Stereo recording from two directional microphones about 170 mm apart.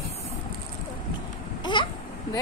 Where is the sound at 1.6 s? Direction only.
25° left (ahead or behind).